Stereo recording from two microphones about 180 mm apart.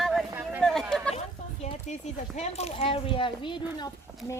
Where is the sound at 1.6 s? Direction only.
40° left (ahead or behind).